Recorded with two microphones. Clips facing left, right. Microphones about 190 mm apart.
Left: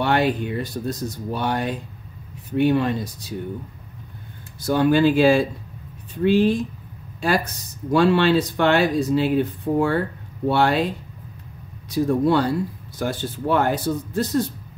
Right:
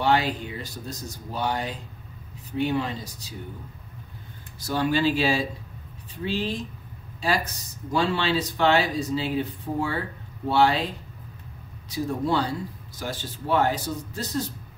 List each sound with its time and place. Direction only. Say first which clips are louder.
0.0 s speech: left 3 dB; 60° left (ahead or behind)
4.6 s speech: left 7 dB; 50° left (ahead or behind)
11.9 s speech: left 7 dB; 60° left (ahead or behind)